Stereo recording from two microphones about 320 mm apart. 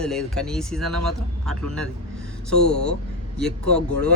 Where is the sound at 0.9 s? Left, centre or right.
Right.